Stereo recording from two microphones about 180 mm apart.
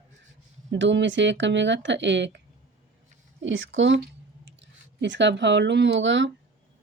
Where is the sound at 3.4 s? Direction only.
90° right.